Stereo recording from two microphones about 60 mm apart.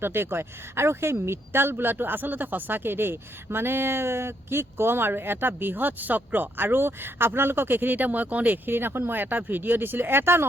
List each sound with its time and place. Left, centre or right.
0.0 s speech: right